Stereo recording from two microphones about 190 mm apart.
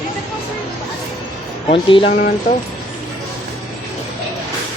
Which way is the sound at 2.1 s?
45° left (ahead or behind).